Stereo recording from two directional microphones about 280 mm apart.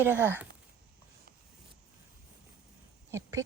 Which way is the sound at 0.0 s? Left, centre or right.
Centre.